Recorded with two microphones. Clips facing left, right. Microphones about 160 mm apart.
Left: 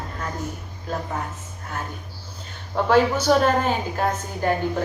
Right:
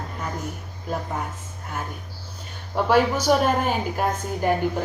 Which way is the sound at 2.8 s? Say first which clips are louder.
Left 1 dB; 10° right (ahead or behind).